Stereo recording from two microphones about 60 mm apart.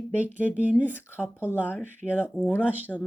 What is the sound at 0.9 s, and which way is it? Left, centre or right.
Speech, left.